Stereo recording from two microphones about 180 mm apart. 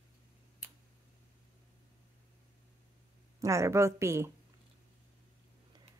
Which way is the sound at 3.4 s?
15° right (ahead or behind).